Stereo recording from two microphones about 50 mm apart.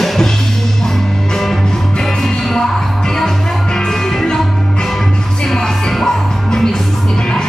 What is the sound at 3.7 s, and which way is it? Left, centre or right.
Music, centre.